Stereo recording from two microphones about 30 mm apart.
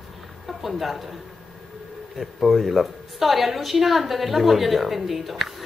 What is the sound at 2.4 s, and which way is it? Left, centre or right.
A woman's voice, centre.